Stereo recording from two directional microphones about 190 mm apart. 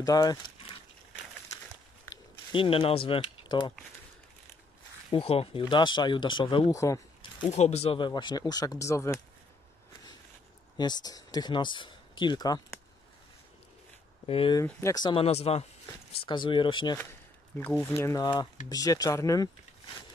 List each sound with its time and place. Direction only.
0.0 s speech: 20° left (ahead or behind)
2.0 s a sound: 25° left (ahead or behind)
5.1 s speech: 30° left (ahead or behind); by 9.2 s 15° left (ahead or behind)
10.8 s speech: 20° left (ahead or behind)
14.2 s speech: 30° left (ahead or behind)
14.6 s speech: 15° left (ahead or behind)
17.6 s speech: 5° left (ahead or behind)